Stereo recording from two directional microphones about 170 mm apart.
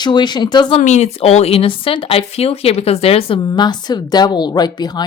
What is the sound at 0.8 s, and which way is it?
Speech, 40° left (ahead or behind).